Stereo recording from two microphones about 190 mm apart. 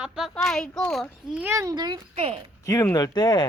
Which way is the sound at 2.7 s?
15° left (ahead or behind).